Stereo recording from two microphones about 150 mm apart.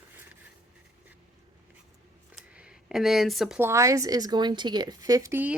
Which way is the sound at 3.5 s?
15° right (ahead or behind).